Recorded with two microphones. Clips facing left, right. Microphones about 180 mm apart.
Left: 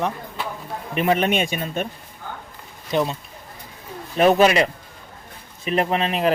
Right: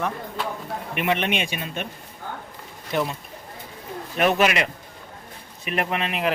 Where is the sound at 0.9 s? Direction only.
40° left (ahead or behind).